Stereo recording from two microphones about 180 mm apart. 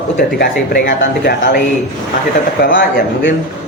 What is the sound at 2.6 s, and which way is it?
Speech, 55° left (ahead or behind).